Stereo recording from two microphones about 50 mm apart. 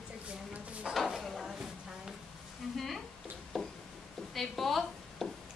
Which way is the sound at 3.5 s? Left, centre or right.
Centre.